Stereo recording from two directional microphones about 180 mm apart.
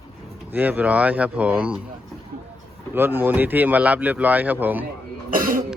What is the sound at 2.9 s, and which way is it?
Speech, 10° right (ahead or behind).